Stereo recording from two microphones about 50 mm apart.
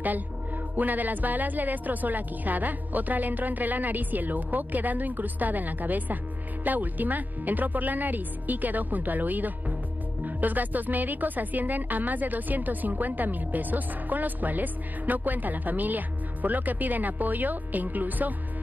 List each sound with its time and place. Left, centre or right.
0.7 s a woman's voice: right